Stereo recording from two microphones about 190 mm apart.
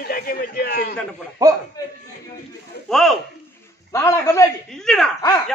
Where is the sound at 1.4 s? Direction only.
15° right (ahead or behind).